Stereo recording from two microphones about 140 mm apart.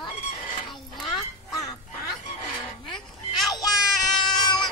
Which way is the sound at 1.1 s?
25° left (ahead or behind).